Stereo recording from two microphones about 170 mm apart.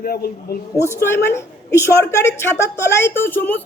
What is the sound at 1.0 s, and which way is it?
A woman's voice, 15° left (ahead or behind).